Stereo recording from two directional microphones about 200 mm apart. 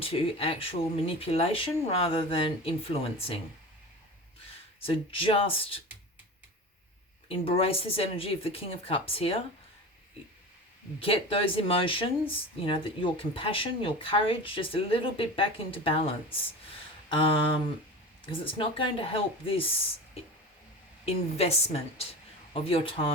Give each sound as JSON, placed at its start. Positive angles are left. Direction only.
{"t": 0.0, "sound": "speech", "side_deg": 30}
{"t": 4.9, "sound": "speech", "side_deg": 25}
{"t": 7.3, "sound": "speech", "side_deg": 30}
{"t": 11.0, "sound": "speech", "side_deg": 30}
{"t": 17.1, "sound": "speech", "side_deg": 25}
{"t": 21.0, "sound": "speech", "side_deg": 30}